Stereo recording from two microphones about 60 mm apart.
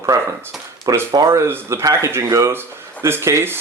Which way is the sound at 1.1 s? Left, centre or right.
Right.